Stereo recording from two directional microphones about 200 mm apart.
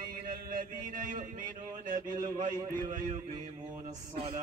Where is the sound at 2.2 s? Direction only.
20° right (ahead or behind).